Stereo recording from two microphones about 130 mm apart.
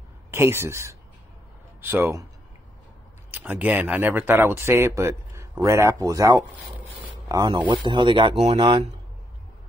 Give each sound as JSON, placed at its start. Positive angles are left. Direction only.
{"t": 0.3, "sound": "speech", "side_deg": -20}
{"t": 3.3, "sound": "speech", "side_deg": -15}